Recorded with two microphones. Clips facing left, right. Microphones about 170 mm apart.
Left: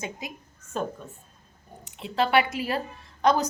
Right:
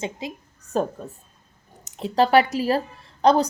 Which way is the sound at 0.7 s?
40° right (ahead or behind).